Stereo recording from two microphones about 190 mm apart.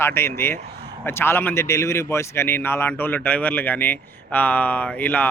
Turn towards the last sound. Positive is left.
turn(degrees=10)  # may be behind; listen again after turning